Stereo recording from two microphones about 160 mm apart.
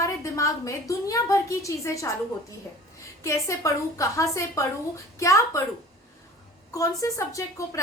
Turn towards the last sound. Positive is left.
turn(degrees=20)  # may be behind; listen again after turning